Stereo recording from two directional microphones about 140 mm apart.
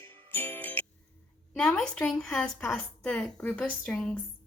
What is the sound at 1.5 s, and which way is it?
A woman's voice, 5° left (ahead or behind).